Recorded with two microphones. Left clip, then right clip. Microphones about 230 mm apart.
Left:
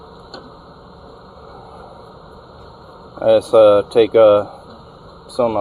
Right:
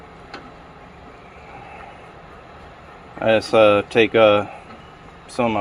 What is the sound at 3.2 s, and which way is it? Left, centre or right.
Speech, right.